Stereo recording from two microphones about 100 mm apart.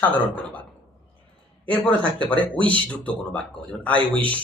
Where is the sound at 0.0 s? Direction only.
15° left (ahead or behind).